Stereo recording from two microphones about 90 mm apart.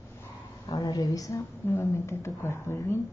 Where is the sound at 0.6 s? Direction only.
45° left (ahead or behind).